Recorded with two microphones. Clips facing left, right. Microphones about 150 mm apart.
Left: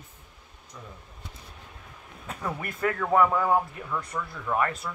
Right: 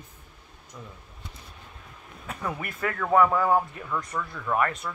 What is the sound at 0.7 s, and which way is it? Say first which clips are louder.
Speech: right 1 dB; 15° right (ahead or behind).